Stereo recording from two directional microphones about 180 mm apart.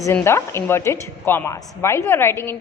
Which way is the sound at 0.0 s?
15° left (ahead or behind).